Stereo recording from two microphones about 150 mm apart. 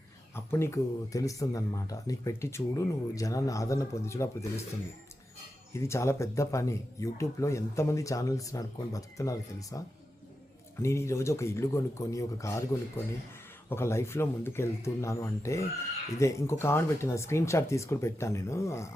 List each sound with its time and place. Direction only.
0.3 s speech: 20° left (ahead or behind)
5.7 s speech: 20° left (ahead or behind)
13.7 s speech: 15° left (ahead or behind)